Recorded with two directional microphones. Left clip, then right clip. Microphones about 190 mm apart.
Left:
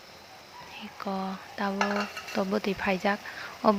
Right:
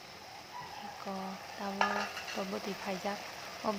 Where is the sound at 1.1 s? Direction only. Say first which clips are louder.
Left 9 dB; 25° left (ahead or behind).